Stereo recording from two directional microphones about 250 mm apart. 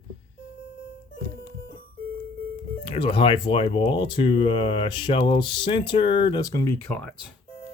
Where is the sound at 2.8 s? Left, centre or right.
Centre.